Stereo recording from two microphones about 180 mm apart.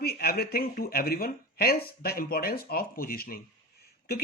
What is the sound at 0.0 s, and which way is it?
Speech, 60° left (ahead or behind).